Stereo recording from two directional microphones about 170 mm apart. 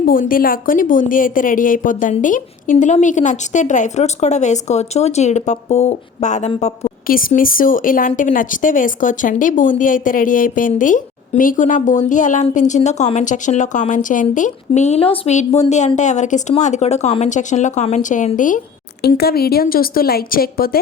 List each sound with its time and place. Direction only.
0.0 s a woman's voice: 55° left (ahead or behind); by 6.9 s 35° left (ahead or behind)
7.1 s a woman's voice: 55° left (ahead or behind)
19.0 s a woman's voice: 70° left (ahead or behind)